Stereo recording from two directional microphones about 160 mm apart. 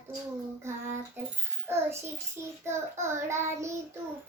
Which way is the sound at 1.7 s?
15° right (ahead or behind).